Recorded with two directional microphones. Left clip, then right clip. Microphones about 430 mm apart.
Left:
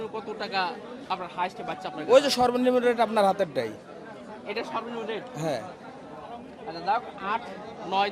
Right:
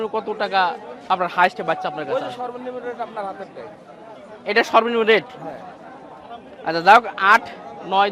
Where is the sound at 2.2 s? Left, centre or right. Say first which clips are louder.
Left 6 dB; left.